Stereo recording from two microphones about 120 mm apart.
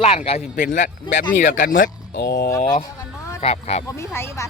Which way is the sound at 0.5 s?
90° left.